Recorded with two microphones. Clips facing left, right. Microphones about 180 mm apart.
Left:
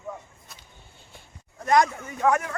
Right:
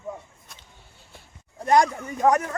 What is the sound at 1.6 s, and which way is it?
Speech, 30° right (ahead or behind).